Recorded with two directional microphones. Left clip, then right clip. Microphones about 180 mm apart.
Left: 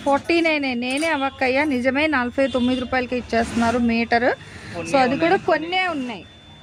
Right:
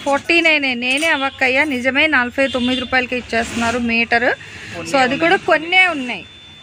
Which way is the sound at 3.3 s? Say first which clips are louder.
Right 1 dB; 20° left (ahead or behind).